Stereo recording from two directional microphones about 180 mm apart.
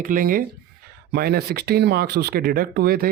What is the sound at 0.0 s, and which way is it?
Speech, 50° right (ahead or behind).